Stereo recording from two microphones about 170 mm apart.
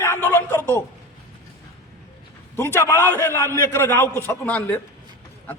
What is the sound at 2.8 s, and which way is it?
A man's voice, 15° left (ahead or behind).